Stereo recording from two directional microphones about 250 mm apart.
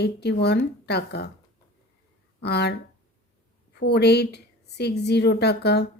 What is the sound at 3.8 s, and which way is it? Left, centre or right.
Speech, left.